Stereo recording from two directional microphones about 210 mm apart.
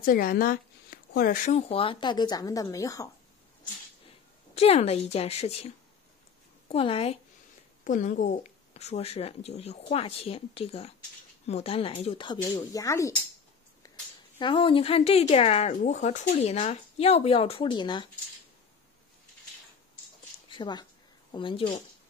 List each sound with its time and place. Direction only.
0.0 s speech: 45° left (ahead or behind); by 3.1 s 15° left (ahead or behind)
4.6 s speech: 30° left (ahead or behind)
6.7 s speech: 25° left (ahead or behind)
7.8 s speech: 35° left (ahead or behind); by 13.1 s 15° left (ahead or behind)
13.8 s a sound: 15° left (ahead or behind)
14.4 s speech: 25° left (ahead or behind)
20.4 s speech: 20° left (ahead or behind)